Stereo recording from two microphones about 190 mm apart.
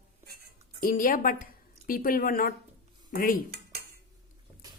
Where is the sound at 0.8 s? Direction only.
45° left (ahead or behind).